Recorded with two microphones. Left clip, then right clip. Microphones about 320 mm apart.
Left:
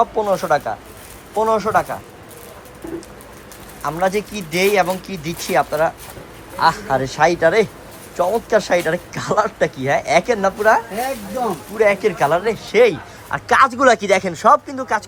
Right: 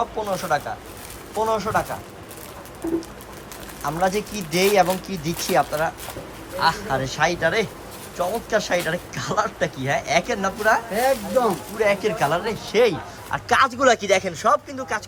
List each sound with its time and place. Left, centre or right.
0.0 s speech: centre
3.8 s speech: centre